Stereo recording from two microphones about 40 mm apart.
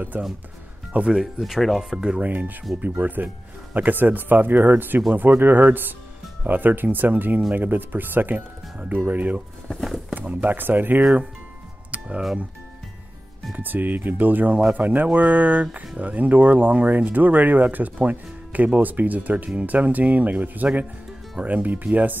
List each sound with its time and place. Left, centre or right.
0.1 s speech: right
1.4 s speech: centre
1.8 s speech: centre
2.8 s speech: right
8.7 s speech: right
9.7 s a sound: centre
10.1 s speech: right
13.6 s speech: right